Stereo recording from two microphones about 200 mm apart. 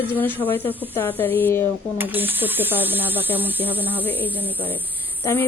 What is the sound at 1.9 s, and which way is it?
Speech, 10° right (ahead or behind).